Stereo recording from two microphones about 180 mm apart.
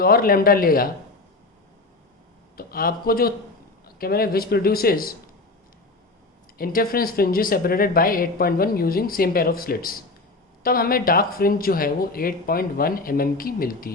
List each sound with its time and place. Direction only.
0.0 s speech: 55° left (ahead or behind)
2.6 s speech: 55° left (ahead or behind)
6.6 s speech: 55° left (ahead or behind)